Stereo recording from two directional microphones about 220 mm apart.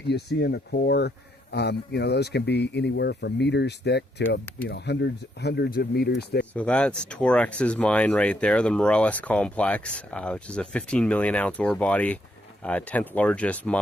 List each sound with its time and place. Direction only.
0.1 s speech: 50° left (ahead or behind)
6.5 s speech: 5° left (ahead or behind)